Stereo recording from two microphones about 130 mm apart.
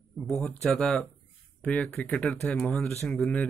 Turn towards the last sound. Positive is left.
turn(degrees=10)  # may be behind; listen again after turning